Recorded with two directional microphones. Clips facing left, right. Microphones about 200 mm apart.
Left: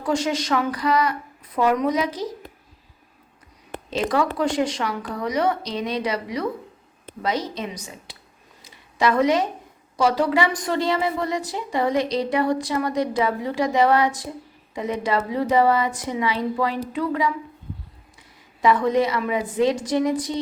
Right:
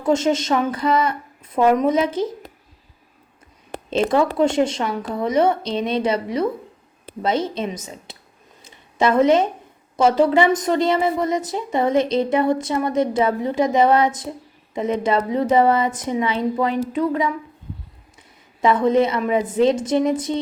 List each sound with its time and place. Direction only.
0.0 s a woman's voice: 25° right (ahead or behind)
3.8 s a woman's voice: 25° right (ahead or behind)
7.2 s a woman's voice: 25° right (ahead or behind)
8.6 s a sound: 25° right (ahead or behind)
10.0 s a woman's voice: 25° right (ahead or behind)
18.6 s a woman's voice: 25° right (ahead or behind)